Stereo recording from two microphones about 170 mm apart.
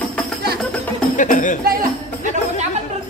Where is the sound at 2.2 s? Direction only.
45° right (ahead or behind).